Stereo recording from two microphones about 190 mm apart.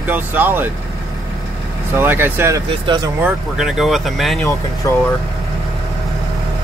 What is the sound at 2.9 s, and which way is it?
Speech, 25° right (ahead or behind).